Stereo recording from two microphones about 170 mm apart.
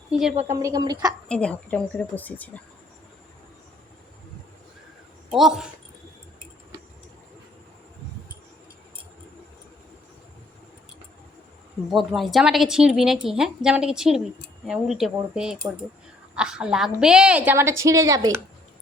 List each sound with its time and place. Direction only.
0.1 s a woman's voice: centre (ahead or behind)
0.4 s a woman's voice: 20° right (ahead or behind)
1.3 s speech: 5° left (ahead or behind)
5.3 s a woman's voice: centre (ahead or behind)
11.9 s a woman's voice: centre (ahead or behind); by 18.3 s 20° right (ahead or behind)